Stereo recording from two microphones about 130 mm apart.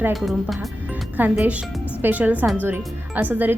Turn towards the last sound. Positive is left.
turn(degrees=-15)  # may be behind; listen again after turning